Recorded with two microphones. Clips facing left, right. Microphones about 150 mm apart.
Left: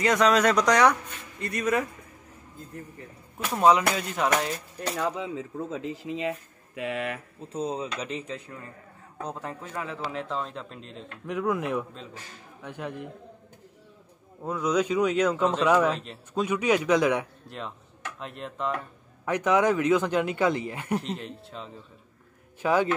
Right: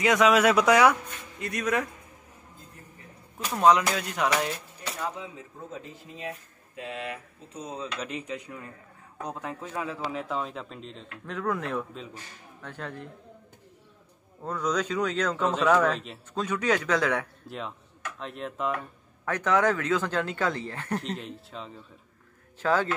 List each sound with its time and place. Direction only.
0.0 s speech: centre (ahead or behind)
3.5 s speech: 5° left (ahead or behind)
4.9 s speech: 90° left; by 7.2 s 70° left (ahead or behind)
7.4 s speech: 25° left (ahead or behind)
8.0 s speech: centre (ahead or behind)
11.2 s speech: 10° left (ahead or behind)
14.4 s speech: 10° left (ahead or behind)
17.5 s speech: centre (ahead or behind)
19.2 s speech: 15° left (ahead or behind)
21.0 s speech: centre (ahead or behind)
22.6 s speech: 15° left (ahead or behind)